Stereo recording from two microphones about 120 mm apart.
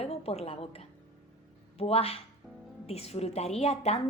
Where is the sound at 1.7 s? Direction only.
55° left (ahead or behind).